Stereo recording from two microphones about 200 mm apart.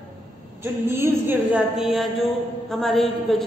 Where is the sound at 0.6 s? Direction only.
10° right (ahead or behind).